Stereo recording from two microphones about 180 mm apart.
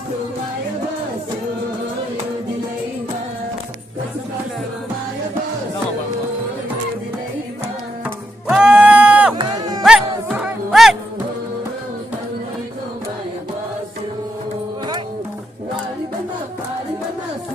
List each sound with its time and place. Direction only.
8.0 s music: 5° right (ahead or behind)
9.3 s music: 20° right (ahead or behind)
9.8 s music: 5° right (ahead or behind)